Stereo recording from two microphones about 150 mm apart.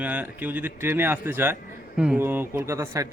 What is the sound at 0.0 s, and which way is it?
A man's voice, 10° right (ahead or behind).